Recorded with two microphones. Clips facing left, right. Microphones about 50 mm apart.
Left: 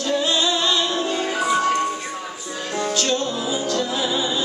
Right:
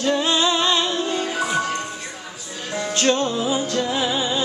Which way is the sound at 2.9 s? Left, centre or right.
Right.